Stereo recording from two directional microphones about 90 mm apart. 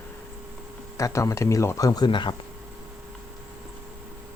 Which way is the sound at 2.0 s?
60° left (ahead or behind).